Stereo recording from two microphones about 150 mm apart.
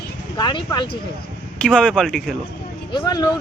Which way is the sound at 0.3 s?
30° left (ahead or behind).